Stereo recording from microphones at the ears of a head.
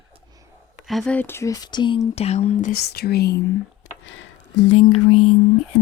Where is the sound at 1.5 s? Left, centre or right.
Left.